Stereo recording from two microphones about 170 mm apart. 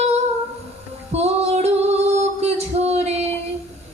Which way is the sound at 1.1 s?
40° right (ahead or behind).